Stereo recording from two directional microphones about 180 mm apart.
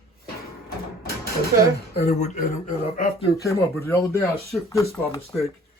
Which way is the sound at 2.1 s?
40° left (ahead or behind).